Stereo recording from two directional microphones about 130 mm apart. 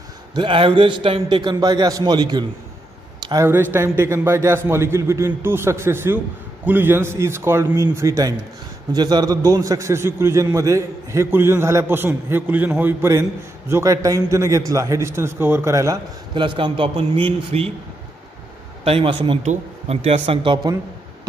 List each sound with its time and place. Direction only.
0.3 s a man's voice: 40° right (ahead or behind)
3.2 s a sound: 35° right (ahead or behind)
3.7 s a man's voice: 20° right (ahead or behind)
16.3 s a man's voice: 40° right (ahead or behind)
17.5 s speech: 55° right (ahead or behind)
18.9 s speech: 45° right (ahead or behind)
19.4 s speech: 55° right (ahead or behind)